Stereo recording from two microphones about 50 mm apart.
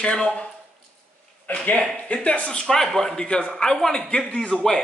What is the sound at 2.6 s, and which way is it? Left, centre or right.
A man's voice, centre.